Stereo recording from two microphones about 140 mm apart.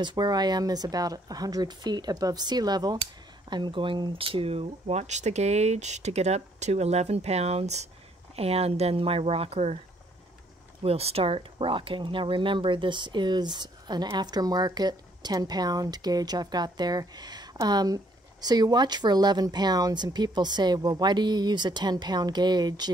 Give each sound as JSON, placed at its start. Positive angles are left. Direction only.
{"t": 0.0, "sound": "speech", "side_deg": -30}
{"t": 10.8, "sound": "speech", "side_deg": -45}